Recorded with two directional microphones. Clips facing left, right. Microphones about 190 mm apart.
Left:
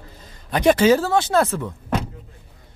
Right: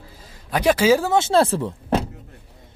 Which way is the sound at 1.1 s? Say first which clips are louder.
Right 1 dB; 25° right (ahead or behind).